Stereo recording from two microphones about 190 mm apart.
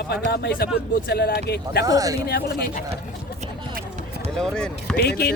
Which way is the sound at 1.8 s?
20° right (ahead or behind).